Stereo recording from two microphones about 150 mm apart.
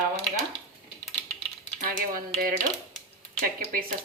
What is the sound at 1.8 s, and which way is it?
Speech, 70° right (ahead or behind).